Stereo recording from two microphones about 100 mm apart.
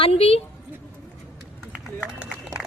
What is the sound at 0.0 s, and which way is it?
Speech, 80° left.